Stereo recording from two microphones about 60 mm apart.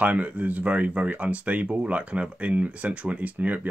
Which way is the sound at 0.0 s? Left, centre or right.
Right.